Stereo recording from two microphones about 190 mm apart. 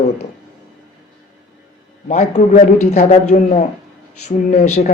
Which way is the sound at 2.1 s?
35° left (ahead or behind).